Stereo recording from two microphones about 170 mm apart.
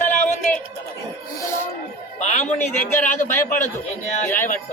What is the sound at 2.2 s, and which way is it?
A man's voice, 45° left (ahead or behind).